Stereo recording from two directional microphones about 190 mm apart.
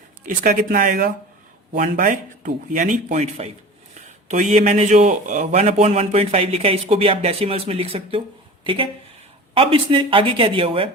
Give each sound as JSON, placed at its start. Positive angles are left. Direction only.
{"t": 0.3, "sound": "speech", "side_deg": -50}